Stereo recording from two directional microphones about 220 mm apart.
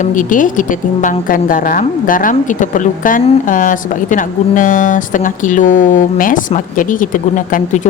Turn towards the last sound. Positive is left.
turn(degrees=35)  # may be behind; listen again after turning